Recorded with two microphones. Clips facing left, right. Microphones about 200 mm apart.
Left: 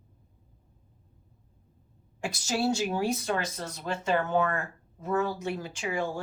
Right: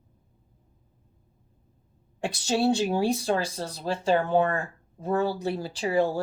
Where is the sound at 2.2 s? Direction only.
35° right (ahead or behind).